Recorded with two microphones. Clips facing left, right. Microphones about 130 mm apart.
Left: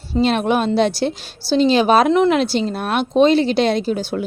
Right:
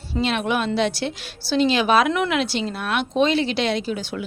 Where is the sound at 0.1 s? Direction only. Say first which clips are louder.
Left 6 dB; 40° left (ahead or behind).